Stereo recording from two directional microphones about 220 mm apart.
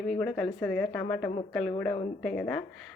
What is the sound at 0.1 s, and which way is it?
A woman's voice, 5° left (ahead or behind).